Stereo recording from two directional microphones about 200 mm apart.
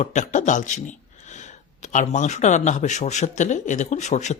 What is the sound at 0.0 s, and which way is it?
Speech, 35° left (ahead or behind).